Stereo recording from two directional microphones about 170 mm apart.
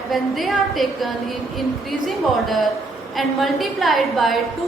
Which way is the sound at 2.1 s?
Centre (ahead or behind).